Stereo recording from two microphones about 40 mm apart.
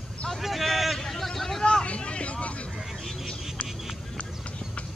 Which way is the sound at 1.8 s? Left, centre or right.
Left.